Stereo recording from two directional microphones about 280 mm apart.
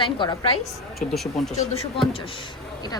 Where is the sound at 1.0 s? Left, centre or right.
Centre.